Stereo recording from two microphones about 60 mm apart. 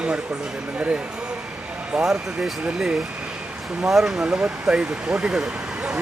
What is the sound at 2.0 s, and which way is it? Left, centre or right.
Speech, centre.